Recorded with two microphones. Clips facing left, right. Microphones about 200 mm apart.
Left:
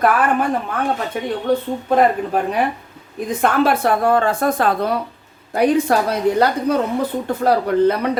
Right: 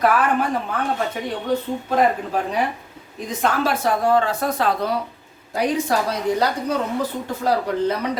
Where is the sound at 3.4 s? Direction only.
60° left (ahead or behind).